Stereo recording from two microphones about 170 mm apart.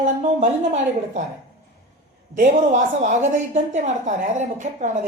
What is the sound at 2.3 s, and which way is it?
Speech, 50° right (ahead or behind).